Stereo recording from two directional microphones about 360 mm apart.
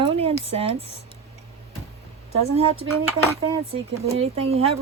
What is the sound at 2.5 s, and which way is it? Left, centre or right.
Speech, centre.